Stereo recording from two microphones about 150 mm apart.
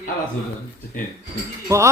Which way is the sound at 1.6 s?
20° right (ahead or behind).